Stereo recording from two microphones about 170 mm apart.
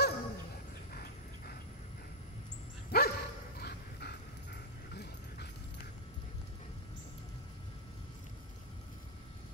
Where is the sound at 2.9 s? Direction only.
65° left (ahead or behind).